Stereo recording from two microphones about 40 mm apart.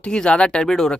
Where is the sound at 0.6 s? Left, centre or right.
Centre.